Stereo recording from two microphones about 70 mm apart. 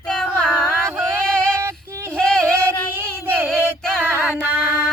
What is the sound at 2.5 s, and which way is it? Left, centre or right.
Music, right.